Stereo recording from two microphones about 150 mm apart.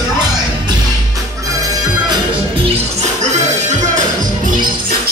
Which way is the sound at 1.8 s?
30° right (ahead or behind).